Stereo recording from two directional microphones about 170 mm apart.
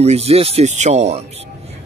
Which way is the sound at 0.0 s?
40° right (ahead or behind).